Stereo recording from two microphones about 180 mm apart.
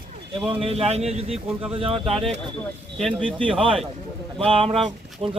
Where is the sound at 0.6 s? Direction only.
35° right (ahead or behind).